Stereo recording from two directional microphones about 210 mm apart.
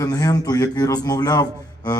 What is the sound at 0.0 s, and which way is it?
A man's voice, 20° left (ahead or behind).